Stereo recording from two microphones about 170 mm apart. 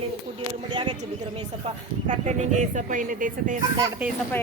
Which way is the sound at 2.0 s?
45° right (ahead or behind).